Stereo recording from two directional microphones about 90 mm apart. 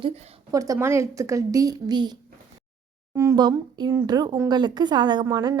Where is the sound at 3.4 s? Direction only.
55° right (ahead or behind).